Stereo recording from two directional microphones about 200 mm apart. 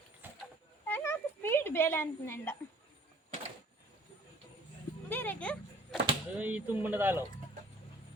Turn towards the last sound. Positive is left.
turn(degrees=-10)  # may be behind; listen again after turning